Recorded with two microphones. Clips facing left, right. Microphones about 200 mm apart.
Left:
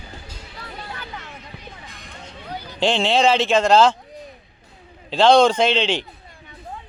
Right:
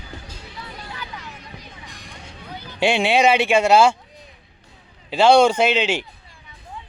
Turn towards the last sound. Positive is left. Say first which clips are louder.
# even
turn(degrees=-10)  # may be behind; listen again after turning